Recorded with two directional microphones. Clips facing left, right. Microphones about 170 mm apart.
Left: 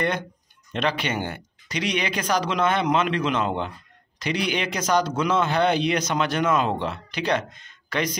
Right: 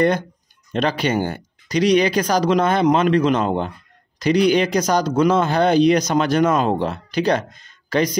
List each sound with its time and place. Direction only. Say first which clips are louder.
0.7 s speech: right 6 dB; 40° right (ahead or behind)